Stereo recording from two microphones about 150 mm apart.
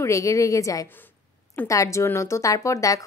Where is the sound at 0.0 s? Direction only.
20° left (ahead or behind).